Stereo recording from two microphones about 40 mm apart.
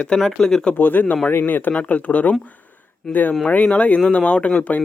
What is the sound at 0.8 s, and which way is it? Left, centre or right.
Speech, left.